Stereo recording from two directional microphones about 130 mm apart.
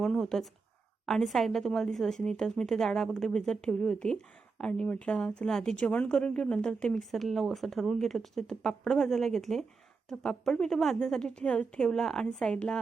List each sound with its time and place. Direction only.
0.0 s a woman's voice: 5° left (ahead or behind)